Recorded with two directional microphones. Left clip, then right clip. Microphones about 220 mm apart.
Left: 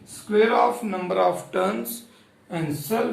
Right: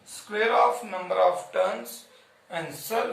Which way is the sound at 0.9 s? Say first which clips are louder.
Left 1 dB; 25° left (ahead or behind).